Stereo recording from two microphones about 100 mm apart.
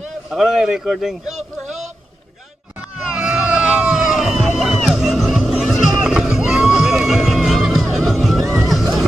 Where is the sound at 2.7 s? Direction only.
10° right (ahead or behind).